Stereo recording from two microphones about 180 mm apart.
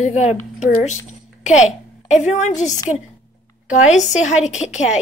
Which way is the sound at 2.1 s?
40° left (ahead or behind).